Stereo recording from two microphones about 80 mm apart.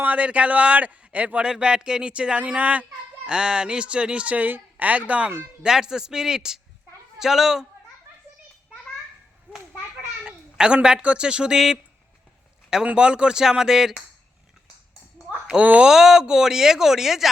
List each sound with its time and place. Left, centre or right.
0.0 s speech: centre
10.2 s speech: centre
15.4 s speech: centre
15.9 s speech: centre